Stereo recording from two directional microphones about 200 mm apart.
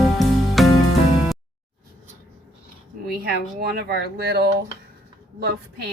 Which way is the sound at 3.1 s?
50° right (ahead or behind).